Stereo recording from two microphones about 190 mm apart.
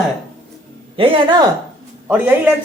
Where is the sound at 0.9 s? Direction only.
30° right (ahead or behind).